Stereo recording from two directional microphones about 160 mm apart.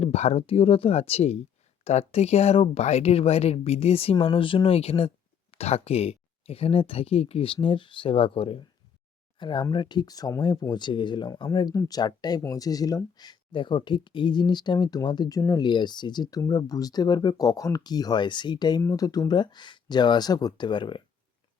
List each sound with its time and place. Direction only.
0.0 s speech: 40° left (ahead or behind)